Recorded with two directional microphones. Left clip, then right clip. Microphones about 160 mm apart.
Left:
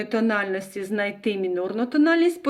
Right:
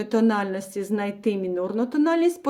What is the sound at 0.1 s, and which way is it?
A woman's voice, 45° right (ahead or behind).